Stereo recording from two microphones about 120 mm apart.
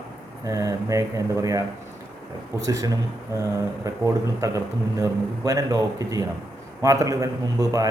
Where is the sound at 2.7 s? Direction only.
25° right (ahead or behind).